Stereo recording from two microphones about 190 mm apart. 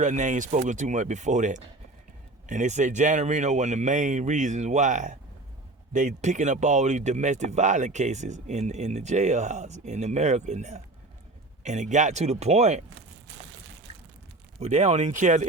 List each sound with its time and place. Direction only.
0.0 s speech: 40° right (ahead or behind)
13.9 s a sound: 30° right (ahead or behind)
14.6 s speech: 35° right (ahead or behind)